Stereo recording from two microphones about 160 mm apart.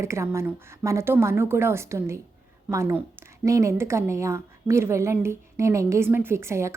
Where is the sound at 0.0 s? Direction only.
15° right (ahead or behind).